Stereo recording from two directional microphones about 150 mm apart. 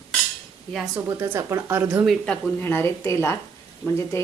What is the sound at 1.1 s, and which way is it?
Speech, 20° right (ahead or behind).